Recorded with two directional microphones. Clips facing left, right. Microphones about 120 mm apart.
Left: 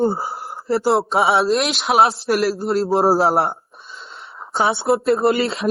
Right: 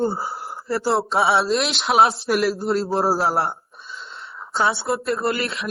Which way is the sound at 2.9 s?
25° left (ahead or behind).